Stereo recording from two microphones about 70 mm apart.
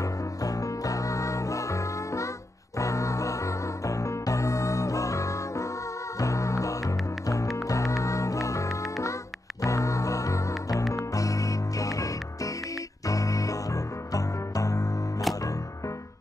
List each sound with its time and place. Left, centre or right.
0.0 s music: left